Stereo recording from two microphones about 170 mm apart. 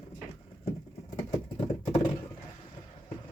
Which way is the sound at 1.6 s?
40° left (ahead or behind).